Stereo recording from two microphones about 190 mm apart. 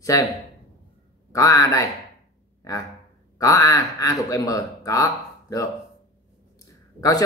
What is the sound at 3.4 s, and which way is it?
Speech, 15° left (ahead or behind).